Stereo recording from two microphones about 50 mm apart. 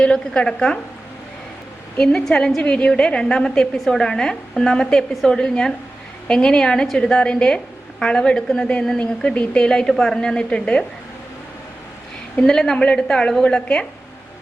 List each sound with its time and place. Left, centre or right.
0.0 s a woman's voice: centre
2.6 s a woman's voice: left
12.4 s a woman's voice: centre